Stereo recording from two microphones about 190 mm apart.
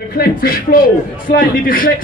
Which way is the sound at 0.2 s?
50° left (ahead or behind).